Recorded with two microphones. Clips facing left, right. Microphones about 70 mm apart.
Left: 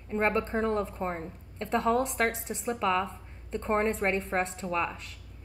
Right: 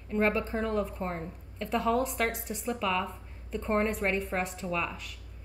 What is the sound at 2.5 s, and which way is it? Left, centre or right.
Speech, left.